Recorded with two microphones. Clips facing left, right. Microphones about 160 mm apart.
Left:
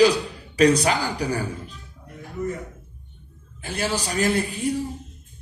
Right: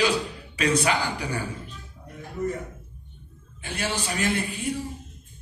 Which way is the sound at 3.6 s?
40° left (ahead or behind).